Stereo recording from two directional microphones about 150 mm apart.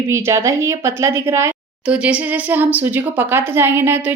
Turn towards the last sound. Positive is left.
turn(degrees=-15)  # may be behind; listen again after turning